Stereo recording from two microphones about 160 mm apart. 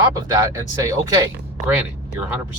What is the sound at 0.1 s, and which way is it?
Speech, 25° right (ahead or behind).